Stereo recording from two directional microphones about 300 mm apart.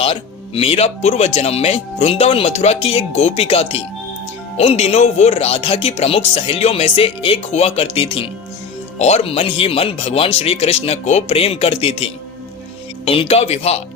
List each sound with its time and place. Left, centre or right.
0.0 s speech: centre